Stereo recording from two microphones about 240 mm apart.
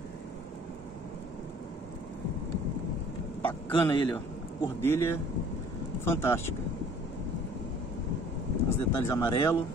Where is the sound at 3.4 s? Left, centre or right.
Centre.